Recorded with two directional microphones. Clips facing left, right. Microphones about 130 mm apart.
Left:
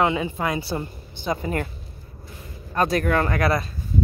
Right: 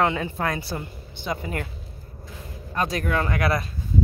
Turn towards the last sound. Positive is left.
turn(degrees=35)  # may be behind; listen again after turning